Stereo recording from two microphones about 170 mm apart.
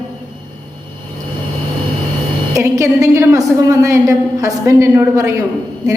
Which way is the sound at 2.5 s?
15° right (ahead or behind).